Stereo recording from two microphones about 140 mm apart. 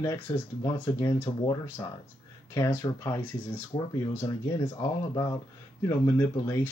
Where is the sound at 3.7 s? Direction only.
35° left (ahead or behind).